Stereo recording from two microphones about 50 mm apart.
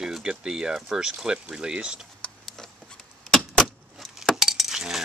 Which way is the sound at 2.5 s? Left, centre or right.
Centre.